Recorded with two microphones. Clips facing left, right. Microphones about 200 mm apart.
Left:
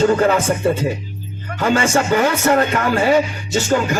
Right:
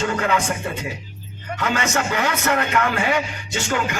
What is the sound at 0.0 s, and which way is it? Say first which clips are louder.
A man's voice: left 7 dB; 35° left (ahead or behind).